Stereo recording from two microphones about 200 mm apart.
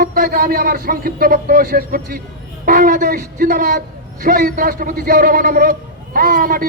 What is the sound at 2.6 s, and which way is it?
A man's voice, 45° right (ahead or behind).